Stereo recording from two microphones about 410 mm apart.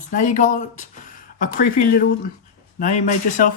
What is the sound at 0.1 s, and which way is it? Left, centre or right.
Speech, centre.